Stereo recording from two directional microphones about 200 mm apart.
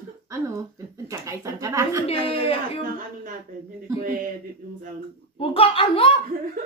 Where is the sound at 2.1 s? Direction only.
25° left (ahead or behind).